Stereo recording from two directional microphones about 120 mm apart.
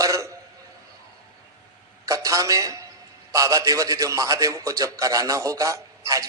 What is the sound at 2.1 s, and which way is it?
A man's voice, 30° right (ahead or behind).